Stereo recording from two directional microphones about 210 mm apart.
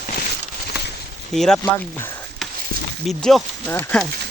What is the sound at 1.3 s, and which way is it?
Speech, centre (ahead or behind).